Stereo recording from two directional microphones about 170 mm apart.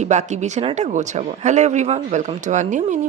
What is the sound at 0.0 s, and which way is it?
Speech, 45° right (ahead or behind).